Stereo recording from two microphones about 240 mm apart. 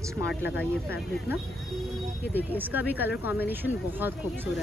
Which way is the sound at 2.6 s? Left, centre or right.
Centre.